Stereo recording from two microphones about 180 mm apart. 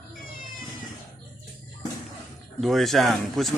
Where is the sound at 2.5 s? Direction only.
Centre (ahead or behind).